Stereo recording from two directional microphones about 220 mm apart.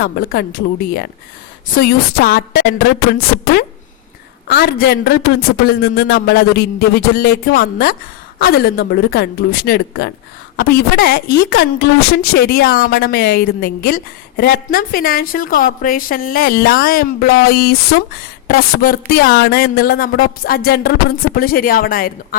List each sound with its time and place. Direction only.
0.0 s a woman's voice: 45° left (ahead or behind)
4.4 s a woman's voice: 45° left (ahead or behind)